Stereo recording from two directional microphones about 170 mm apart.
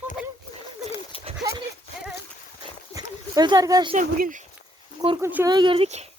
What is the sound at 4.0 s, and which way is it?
Speech, 50° right (ahead or behind).